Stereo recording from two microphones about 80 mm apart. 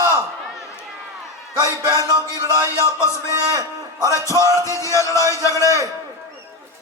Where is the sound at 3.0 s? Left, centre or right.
Left.